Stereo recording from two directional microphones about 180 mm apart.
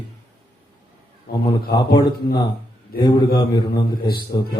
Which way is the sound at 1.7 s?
25° left (ahead or behind).